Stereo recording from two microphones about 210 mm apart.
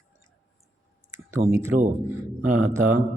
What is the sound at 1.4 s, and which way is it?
Speech, 45° right (ahead or behind).